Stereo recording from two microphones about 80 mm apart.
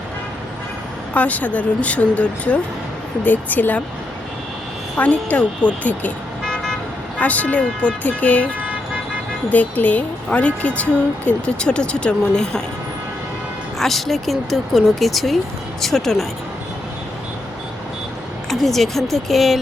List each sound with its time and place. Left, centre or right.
1.1 s speech: centre
4.9 s speech: centre
6.4 s vehicle: centre
7.2 s speech: centre
9.5 s speech: centre
13.7 s speech: centre
18.4 s speech: centre